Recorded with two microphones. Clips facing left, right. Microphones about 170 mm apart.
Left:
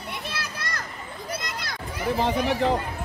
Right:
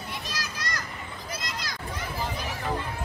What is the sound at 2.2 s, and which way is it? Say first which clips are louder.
Speech: left 11 dB; 80° left.